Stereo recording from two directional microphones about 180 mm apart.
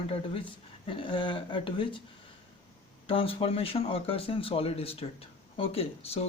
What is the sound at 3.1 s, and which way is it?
Speech, 30° left (ahead or behind).